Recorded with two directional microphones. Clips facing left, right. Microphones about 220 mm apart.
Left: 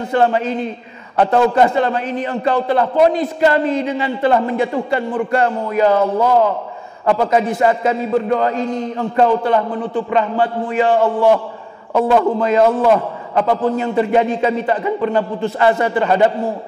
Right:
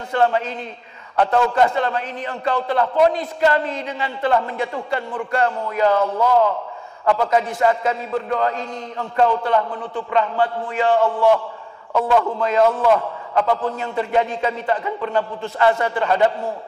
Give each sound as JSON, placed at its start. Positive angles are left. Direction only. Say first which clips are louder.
{"t": 0.1, "sound": "a man's voice", "louder": "left 3 dB", "side_deg": 10}